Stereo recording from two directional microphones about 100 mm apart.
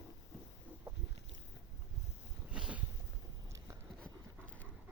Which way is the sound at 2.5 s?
10° right (ahead or behind).